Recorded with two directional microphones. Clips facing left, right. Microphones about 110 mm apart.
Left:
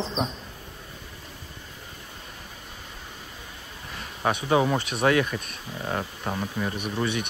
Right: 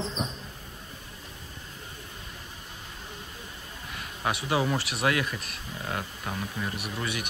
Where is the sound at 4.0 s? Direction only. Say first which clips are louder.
Left 4 dB; 30° left (ahead or behind).